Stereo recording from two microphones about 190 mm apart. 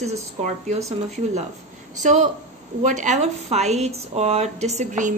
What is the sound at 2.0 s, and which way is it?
A woman's voice, 40° right (ahead or behind).